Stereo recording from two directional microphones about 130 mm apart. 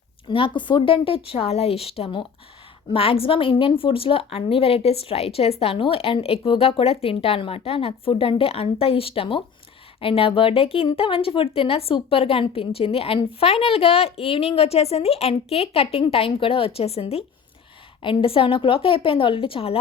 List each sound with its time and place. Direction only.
0.3 s speech: 40° left (ahead or behind)
2.9 s speech: 45° left (ahead or behind)